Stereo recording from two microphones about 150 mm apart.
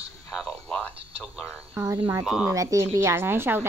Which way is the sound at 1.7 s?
15° right (ahead or behind).